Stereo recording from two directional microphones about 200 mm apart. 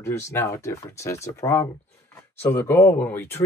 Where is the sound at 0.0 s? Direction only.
15° left (ahead or behind).